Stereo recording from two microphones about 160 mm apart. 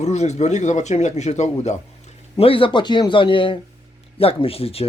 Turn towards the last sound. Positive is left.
turn(degrees=40)  # may be behind; listen again after turning